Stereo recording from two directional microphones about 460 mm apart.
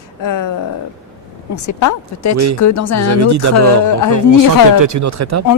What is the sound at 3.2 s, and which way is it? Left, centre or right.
Speech, right.